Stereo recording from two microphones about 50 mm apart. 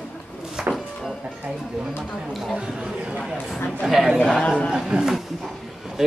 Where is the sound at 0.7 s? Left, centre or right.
Right.